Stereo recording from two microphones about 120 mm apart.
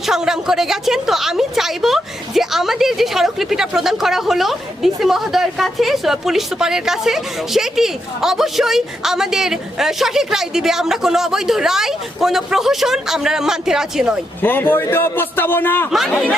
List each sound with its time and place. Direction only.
0.0 s a woman's voice: 5° right (ahead or behind)
14.4 s a man's voice: 15° left (ahead or behind)
15.9 s a woman's voice: centre (ahead or behind)